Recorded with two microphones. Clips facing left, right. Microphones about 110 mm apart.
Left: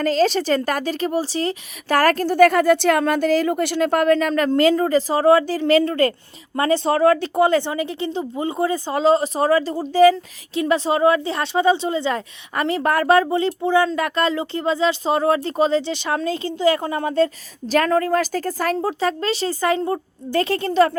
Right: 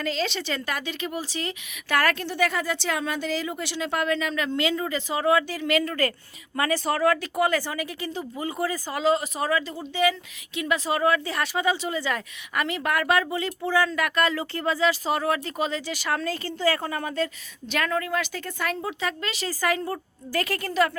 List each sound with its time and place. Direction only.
0.0 s speech: 40° left (ahead or behind)
17.7 s speech: 40° left (ahead or behind)